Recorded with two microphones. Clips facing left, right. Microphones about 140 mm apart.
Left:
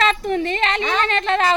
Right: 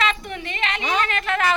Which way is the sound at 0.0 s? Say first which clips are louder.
Left 6 dB; 35° left (ahead or behind).